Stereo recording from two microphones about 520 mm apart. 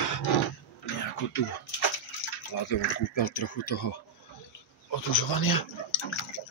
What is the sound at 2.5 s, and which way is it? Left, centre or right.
Speech, left.